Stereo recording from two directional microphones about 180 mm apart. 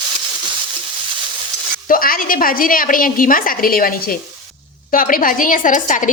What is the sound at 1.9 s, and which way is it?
Speech, 55° left (ahead or behind).